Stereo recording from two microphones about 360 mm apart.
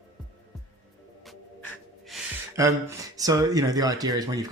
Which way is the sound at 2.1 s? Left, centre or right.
Centre.